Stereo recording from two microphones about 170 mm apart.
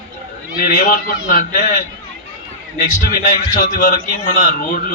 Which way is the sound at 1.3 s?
50° left (ahead or behind).